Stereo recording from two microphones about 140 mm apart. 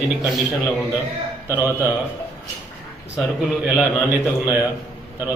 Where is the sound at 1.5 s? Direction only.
15° right (ahead or behind).